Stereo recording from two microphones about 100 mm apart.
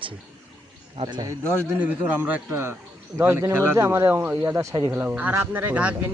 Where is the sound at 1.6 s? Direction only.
15° right (ahead or behind).